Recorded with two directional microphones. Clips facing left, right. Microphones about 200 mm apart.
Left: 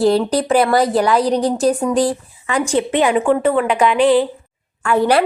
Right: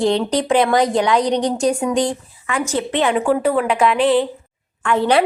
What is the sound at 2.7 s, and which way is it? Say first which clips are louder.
Speech: left 3 dB; 15° left (ahead or behind).